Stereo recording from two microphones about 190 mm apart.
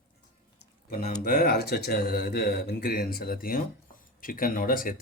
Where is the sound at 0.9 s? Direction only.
45° left (ahead or behind).